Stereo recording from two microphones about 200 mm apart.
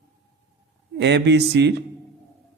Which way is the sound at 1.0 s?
60° right (ahead or behind).